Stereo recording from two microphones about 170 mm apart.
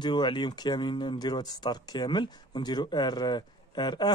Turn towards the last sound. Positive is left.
turn(degrees=25)  # may be behind; listen again after turning